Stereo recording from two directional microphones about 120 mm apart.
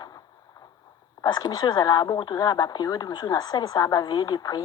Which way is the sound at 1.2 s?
35° left (ahead or behind).